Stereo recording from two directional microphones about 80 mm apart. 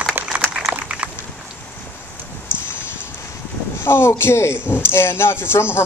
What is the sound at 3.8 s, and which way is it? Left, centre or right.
Speech, left.